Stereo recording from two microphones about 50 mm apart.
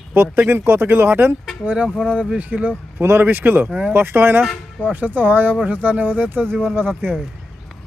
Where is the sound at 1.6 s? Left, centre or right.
Right.